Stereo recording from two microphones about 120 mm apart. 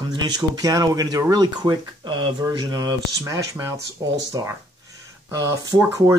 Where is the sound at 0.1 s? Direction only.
35° right (ahead or behind).